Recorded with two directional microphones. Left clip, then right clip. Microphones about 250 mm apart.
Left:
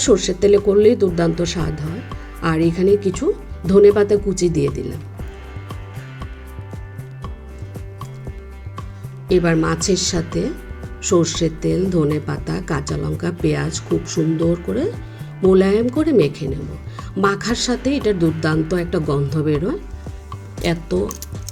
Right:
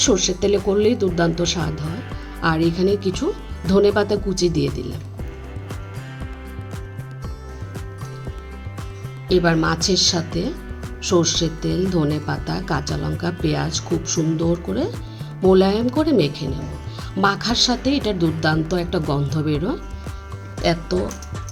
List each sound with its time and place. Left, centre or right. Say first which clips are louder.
0.0 s speech: left 3 dB; centre
9.3 s speech: left 1 dB; centre